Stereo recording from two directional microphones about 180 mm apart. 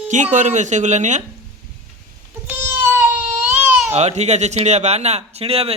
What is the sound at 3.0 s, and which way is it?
Baby cry, 10° right (ahead or behind).